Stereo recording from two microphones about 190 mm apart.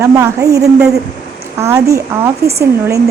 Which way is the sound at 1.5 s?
15° right (ahead or behind).